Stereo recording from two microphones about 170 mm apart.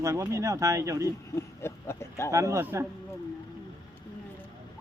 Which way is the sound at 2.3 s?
15° right (ahead or behind).